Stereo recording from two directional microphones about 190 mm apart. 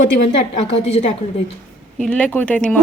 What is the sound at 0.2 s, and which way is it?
Speech, 35° left (ahead or behind).